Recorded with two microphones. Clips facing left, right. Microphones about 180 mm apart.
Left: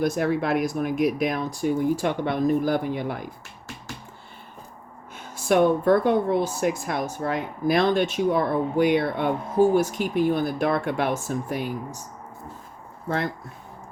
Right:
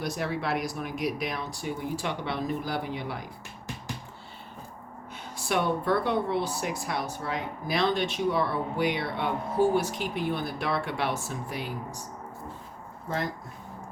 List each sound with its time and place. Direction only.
0.0 s speech: 50° left (ahead or behind)
5.1 s speech: 45° left (ahead or behind)